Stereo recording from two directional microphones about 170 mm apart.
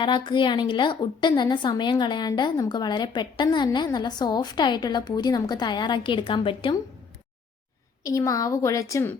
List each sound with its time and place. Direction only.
0.0 s a woman's voice: 30° left (ahead or behind)
8.0 s a woman's voice: 20° left (ahead or behind)